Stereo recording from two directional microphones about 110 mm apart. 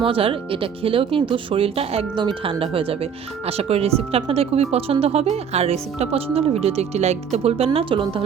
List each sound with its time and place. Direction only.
0.0 s speech: 55° right (ahead or behind)
2.1 s speech: 50° right (ahead or behind)